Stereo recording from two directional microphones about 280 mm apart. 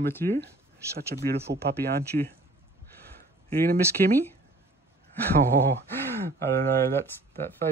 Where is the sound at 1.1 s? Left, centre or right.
Right.